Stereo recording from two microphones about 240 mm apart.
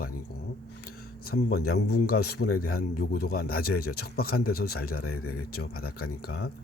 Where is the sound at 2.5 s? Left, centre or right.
Left.